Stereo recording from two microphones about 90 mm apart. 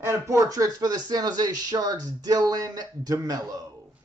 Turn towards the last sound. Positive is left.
turn(degrees=-45)  # may be behind; listen again after turning